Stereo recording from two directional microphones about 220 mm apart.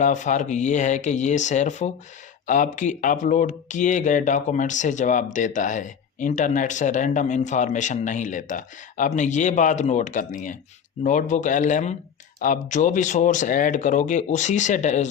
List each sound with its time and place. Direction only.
0.0 s speech: 35° left (ahead or behind)